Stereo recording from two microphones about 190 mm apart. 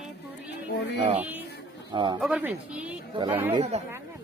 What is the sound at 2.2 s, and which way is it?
Speech, 5° right (ahead or behind).